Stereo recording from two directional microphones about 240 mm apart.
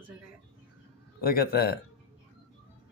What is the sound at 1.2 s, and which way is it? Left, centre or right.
Speech, left.